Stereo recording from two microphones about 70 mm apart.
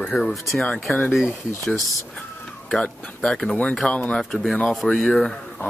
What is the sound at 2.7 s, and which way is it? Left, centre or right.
Speech, centre.